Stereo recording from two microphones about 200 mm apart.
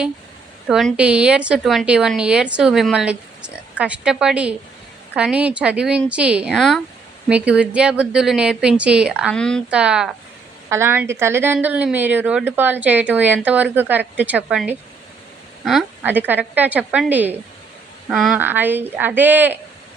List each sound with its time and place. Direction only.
0.7 s a woman's voice: centre (ahead or behind)